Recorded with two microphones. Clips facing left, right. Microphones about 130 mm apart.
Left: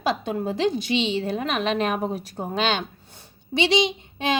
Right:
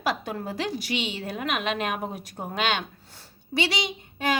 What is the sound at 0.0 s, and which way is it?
A woman's voice, 25° left (ahead or behind).